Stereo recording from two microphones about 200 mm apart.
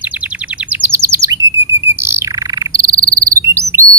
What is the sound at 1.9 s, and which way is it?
Bird, 15° right (ahead or behind).